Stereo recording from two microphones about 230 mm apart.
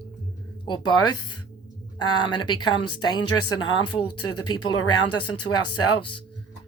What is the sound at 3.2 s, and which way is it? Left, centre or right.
Speech, left.